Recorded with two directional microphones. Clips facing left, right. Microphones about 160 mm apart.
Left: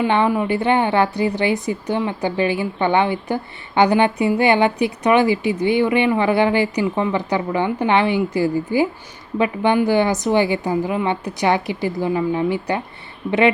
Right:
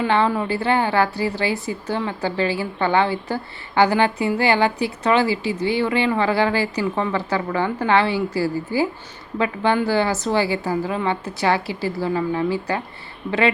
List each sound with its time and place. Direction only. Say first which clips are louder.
0.0 s a woman's voice: left 2 dB; 15° left (ahead or behind)